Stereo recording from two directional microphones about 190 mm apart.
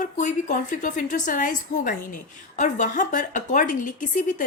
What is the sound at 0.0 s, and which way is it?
Speech, 40° left (ahead or behind).